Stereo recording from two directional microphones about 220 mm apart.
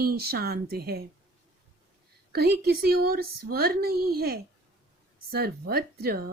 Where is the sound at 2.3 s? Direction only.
45° right (ahead or behind).